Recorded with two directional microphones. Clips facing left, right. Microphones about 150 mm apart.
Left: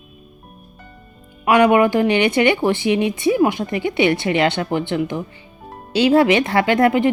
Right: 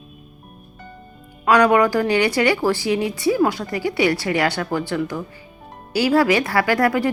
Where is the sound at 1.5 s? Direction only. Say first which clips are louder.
Left 2 dB; 20° left (ahead or behind).